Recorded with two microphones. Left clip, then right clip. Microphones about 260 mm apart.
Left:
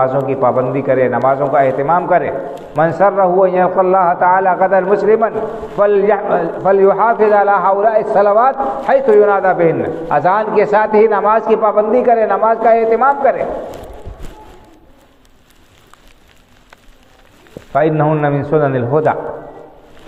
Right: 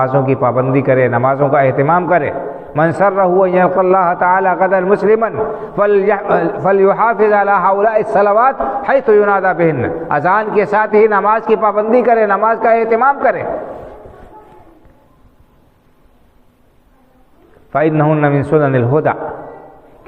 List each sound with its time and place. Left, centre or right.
0.0 s a man's voice: right
17.7 s a man's voice: right